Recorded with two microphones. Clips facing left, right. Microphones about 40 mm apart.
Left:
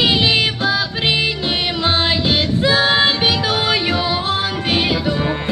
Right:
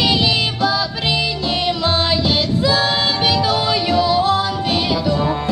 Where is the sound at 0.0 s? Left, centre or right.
Left.